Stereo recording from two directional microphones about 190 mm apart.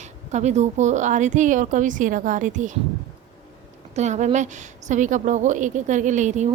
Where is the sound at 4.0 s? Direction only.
40° right (ahead or behind).